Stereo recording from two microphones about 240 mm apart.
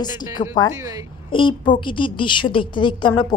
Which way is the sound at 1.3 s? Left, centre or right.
Centre.